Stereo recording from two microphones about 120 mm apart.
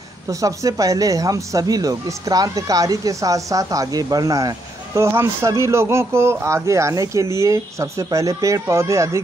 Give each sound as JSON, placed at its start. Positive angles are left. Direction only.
{"t": 0.3, "sound": "speech", "side_deg": -30}